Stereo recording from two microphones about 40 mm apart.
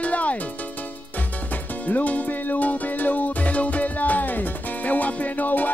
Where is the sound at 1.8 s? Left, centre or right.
Left.